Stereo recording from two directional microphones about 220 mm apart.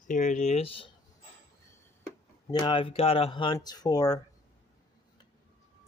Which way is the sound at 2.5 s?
20° left (ahead or behind).